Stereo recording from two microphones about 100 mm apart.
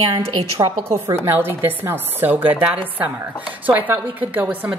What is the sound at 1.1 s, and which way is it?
Speech, 20° right (ahead or behind).